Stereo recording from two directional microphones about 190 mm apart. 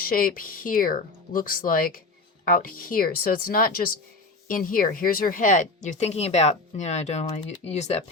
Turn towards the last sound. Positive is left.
turn(degrees=35)  # may be behind; listen again after turning